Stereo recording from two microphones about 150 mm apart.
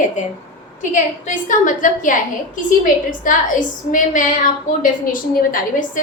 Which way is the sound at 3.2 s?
60° left (ahead or behind).